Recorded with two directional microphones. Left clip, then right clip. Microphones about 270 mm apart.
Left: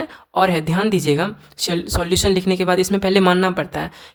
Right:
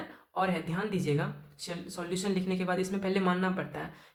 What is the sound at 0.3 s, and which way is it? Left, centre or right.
Speech, left.